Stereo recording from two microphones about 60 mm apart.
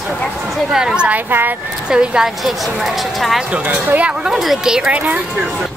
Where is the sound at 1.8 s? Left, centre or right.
Centre.